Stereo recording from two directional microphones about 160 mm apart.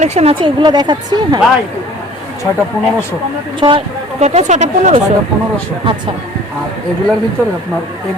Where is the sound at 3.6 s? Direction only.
30° right (ahead or behind); by 5.0 s 45° right (ahead or behind).